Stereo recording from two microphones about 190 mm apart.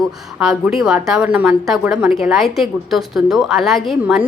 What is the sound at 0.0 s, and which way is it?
A woman's voice, centre (ahead or behind).